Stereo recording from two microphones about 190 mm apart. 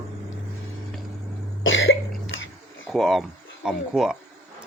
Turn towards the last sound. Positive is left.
turn(degrees=-5)  # may be behind; listen again after turning